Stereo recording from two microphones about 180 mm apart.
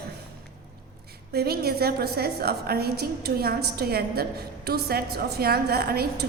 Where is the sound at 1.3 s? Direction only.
60° right (ahead or behind).